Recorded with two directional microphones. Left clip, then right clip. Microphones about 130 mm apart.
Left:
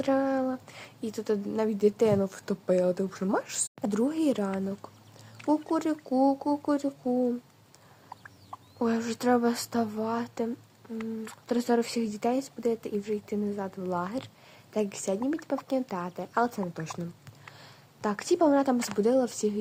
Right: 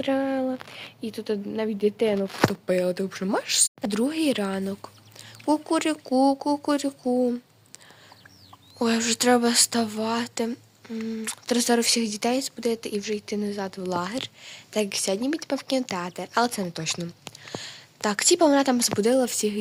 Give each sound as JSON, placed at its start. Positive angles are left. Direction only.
{"t": 0.0, "sound": "speech", "side_deg": -10}
{"t": 4.6, "sound": "speech", "side_deg": -40}
{"t": 5.5, "sound": "speech", "side_deg": -15}
{"t": 8.8, "sound": "speech", "side_deg": -15}
{"t": 13.6, "sound": "speech", "side_deg": -35}
{"t": 13.8, "sound": "speech", "side_deg": -15}